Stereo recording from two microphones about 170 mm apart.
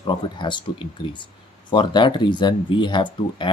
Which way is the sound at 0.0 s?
25° left (ahead or behind).